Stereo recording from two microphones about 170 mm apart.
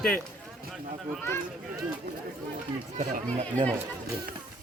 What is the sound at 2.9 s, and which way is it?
Speech, 45° right (ahead or behind).